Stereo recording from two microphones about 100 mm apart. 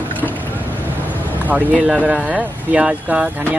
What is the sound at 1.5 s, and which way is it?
Speech, 5° right (ahead or behind).